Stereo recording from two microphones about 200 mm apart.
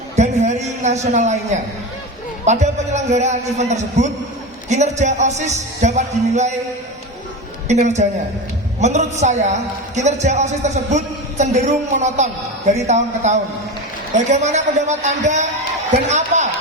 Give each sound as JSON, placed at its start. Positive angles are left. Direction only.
{"t": 0.2, "sound": "a man's voice", "side_deg": -35}
{"t": 2.4, "sound": "a man's voice", "side_deg": -35}
{"t": 7.7, "sound": "a man's voice", "side_deg": -35}